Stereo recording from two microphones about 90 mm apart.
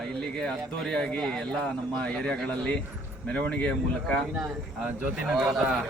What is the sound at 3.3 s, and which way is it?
Speech, 15° left (ahead or behind).